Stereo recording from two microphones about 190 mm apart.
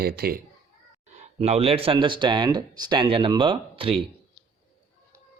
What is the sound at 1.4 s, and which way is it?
Speech, 35° right (ahead or behind).